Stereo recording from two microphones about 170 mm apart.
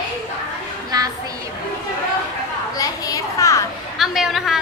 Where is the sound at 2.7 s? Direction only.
20° left (ahead or behind).